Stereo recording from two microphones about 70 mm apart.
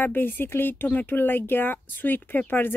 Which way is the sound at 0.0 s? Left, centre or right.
Left.